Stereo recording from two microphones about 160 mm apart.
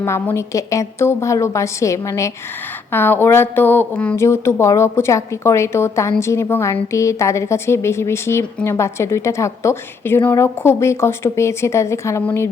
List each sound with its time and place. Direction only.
0.0 s speech: 15° left (ahead or behind)